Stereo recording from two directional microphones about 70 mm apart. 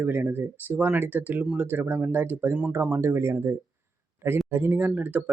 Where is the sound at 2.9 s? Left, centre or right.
Right.